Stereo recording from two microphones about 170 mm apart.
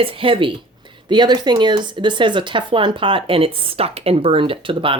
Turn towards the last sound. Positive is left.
turn(degrees=-30)  # may be behind; listen again after turning